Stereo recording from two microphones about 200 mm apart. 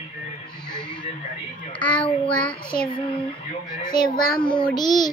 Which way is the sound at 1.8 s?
5° left (ahead or behind).